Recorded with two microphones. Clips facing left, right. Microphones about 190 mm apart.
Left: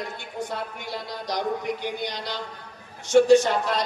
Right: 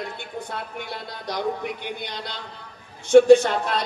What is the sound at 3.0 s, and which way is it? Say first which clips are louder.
Speech: right 4 dB; 55° right (ahead or behind).